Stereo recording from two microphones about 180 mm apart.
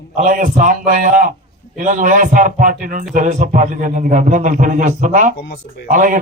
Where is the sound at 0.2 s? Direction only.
45° right (ahead or behind).